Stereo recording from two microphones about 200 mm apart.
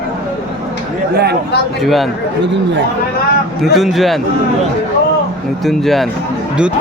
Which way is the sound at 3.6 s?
Centre (ahead or behind).